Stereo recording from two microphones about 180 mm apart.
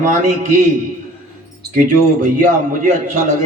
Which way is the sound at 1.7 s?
45° right (ahead or behind).